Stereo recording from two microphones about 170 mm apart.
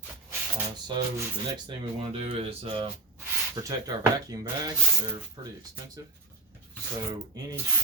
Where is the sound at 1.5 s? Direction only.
30° right (ahead or behind).